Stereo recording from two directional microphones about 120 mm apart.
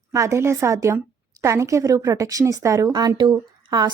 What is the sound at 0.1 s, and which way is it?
A woman's voice, 25° right (ahead or behind).